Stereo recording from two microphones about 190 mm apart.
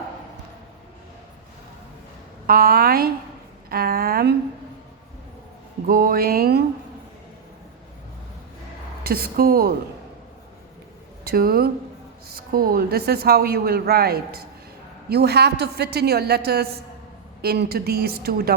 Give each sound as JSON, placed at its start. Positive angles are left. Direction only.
{"t": 2.5, "sound": "music", "side_deg": -55}
{"t": 5.9, "sound": "music", "side_deg": -50}
{"t": 9.0, "sound": "music", "side_deg": -50}
{"t": 11.2, "sound": "a woman's voice", "side_deg": -55}